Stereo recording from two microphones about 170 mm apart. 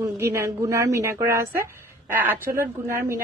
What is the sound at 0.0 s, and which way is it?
A woman's voice, 15° right (ahead or behind).